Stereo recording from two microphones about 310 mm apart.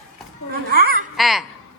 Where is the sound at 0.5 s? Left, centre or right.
Right.